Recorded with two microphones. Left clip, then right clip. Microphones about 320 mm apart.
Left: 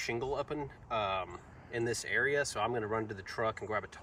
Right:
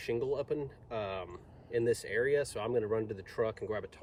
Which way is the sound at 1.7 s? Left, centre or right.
Centre.